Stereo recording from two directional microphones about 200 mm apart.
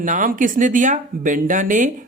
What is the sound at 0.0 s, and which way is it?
Speech, 40° right (ahead or behind).